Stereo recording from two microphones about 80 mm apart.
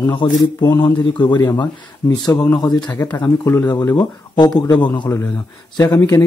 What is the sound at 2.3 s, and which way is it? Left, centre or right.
Speech, centre.